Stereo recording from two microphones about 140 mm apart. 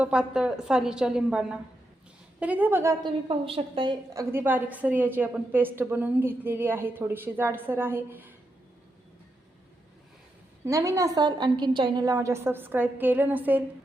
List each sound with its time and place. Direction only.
0.0 s a woman's voice: 5° right (ahead or behind)
3.0 s a woman's voice: 40° right (ahead or behind)
4.1 s a woman's voice: 20° right (ahead or behind)
10.7 s a woman's voice: 20° right (ahead or behind)
12.0 s a woman's voice: 20° right (ahead or behind)